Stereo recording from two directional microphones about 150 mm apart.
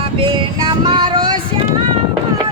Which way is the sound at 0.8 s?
30° right (ahead or behind).